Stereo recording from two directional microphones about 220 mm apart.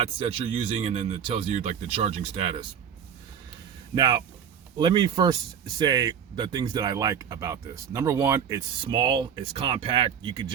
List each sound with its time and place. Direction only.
0.0 s speech: 25° right (ahead or behind)
3.9 s speech: 20° right (ahead or behind)